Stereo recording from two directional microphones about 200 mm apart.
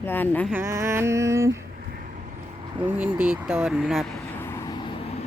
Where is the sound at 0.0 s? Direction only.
10° left (ahead or behind).